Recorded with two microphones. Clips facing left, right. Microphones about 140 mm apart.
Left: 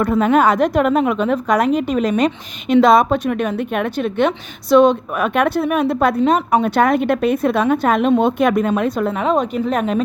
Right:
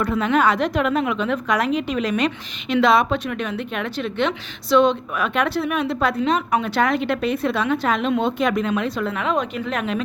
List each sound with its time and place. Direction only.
0.0 s a woman's voice: 45° left (ahead or behind)